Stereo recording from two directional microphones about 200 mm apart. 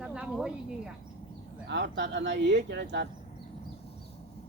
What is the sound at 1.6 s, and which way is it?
Speech, 60° right (ahead or behind).